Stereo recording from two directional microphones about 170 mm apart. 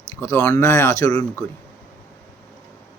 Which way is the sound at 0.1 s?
15° left (ahead or behind).